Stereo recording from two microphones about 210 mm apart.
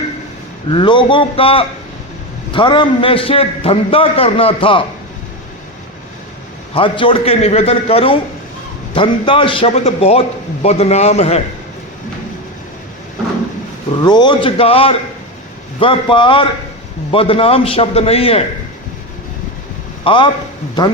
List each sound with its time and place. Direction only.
0.7 s a man's voice: 25° left (ahead or behind)
6.7 s a man's voice: 25° left (ahead or behind)
14.0 s a man's voice: 20° left (ahead or behind)
20.1 s a man's voice: 25° left (ahead or behind)